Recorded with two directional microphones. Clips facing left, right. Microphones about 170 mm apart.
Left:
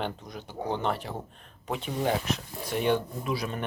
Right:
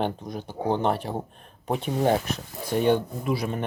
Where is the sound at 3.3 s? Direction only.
25° right (ahead or behind).